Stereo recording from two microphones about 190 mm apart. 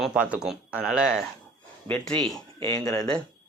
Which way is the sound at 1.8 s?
10° left (ahead or behind).